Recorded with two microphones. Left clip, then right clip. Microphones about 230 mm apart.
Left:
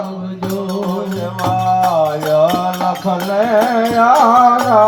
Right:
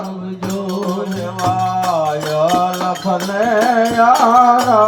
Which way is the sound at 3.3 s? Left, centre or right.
Left.